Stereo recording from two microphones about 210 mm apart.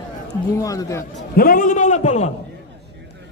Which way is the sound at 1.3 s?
40° left (ahead or behind).